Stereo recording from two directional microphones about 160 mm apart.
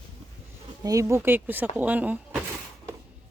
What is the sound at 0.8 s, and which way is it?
Speech, 20° right (ahead or behind).